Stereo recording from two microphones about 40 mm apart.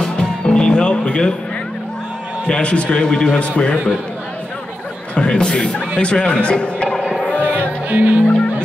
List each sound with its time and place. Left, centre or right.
0.0 s music: centre
2.4 s speech: left
3.3 s speech: left
5.1 s speech: left
7.4 s music: right